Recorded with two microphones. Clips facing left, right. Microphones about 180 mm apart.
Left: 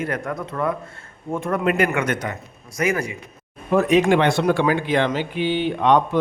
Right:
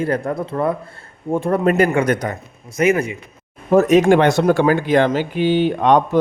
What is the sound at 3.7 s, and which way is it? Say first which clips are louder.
Speech: right 4 dB; 45° right (ahead or behind).